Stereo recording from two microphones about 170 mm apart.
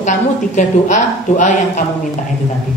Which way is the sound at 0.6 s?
45° left (ahead or behind).